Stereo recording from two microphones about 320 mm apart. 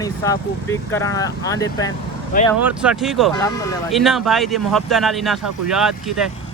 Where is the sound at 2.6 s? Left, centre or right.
Centre.